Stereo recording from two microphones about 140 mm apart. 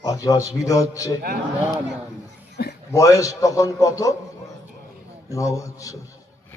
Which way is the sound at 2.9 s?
25° left (ahead or behind).